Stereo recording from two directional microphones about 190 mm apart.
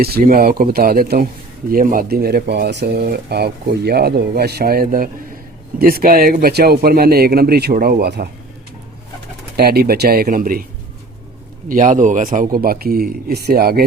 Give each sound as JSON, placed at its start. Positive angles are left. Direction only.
{"t": 0.0, "sound": "speech", "side_deg": -50}
{"t": 9.6, "sound": "speech", "side_deg": -55}
{"t": 11.7, "sound": "speech", "side_deg": -45}